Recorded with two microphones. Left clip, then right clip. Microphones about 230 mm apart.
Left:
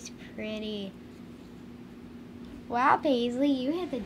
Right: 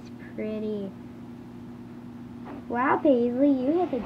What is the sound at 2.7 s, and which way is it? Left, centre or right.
Speech, left.